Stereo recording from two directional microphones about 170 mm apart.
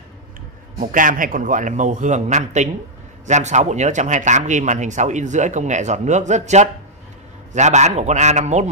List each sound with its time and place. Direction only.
0.7 s speech: 50° right (ahead or behind)